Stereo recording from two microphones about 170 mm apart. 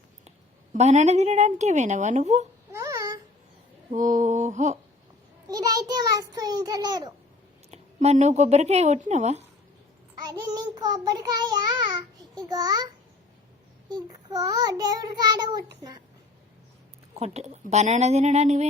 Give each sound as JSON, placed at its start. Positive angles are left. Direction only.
{"t": 0.3, "sound": "a woman's voice", "side_deg": -40}
{"t": 2.7, "sound": "babbling", "side_deg": -20}
{"t": 3.9, "sound": "a sound", "side_deg": -50}
{"t": 5.5, "sound": "child singing", "side_deg": -20}
{"t": 7.7, "sound": "a woman's voice", "side_deg": -40}
{"t": 10.2, "sound": "child singing", "side_deg": -25}
{"t": 13.9, "sound": "child singing", "side_deg": -25}
{"t": 17.2, "sound": "speech", "side_deg": -40}